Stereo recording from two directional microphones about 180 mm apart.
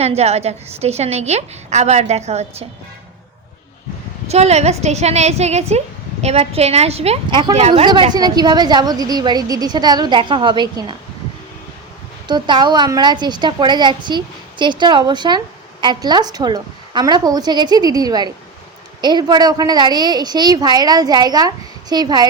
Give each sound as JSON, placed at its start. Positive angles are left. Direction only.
{"t": 0.0, "sound": "a woman's voice", "side_deg": -35}
{"t": 4.3, "sound": "a woman's voice", "side_deg": -35}
{"t": 12.3, "sound": "a woman's voice", "side_deg": -25}